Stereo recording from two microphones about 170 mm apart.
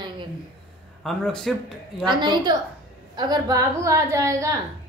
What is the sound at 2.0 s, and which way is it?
A woman's voice, 25° right (ahead or behind).